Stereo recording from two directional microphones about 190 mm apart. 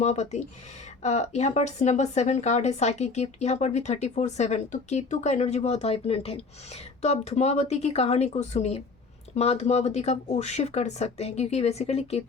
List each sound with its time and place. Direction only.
0.0 s speech: 35° left (ahead or behind)